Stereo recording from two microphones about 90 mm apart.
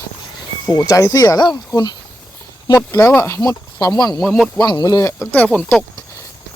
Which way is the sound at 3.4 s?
50° left (ahead or behind).